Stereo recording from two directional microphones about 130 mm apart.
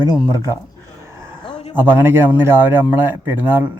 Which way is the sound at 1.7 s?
15° right (ahead or behind).